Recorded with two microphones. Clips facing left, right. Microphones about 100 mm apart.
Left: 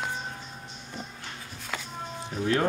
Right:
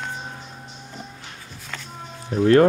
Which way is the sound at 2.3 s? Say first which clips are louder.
Right 11 dB; 65° right (ahead or behind).